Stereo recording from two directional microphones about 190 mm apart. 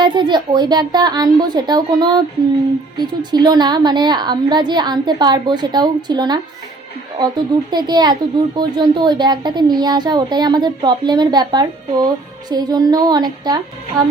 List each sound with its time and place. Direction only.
0.0 s speech: 25° right (ahead or behind)